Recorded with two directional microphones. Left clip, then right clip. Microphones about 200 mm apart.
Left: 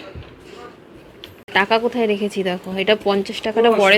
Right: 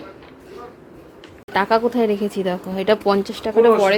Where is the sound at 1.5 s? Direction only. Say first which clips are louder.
Even; 10° right (ahead or behind).